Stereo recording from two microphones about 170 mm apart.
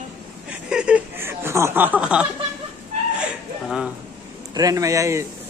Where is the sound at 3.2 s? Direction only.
5° right (ahead or behind).